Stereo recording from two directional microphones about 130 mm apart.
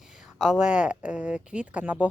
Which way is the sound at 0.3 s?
5° right (ahead or behind).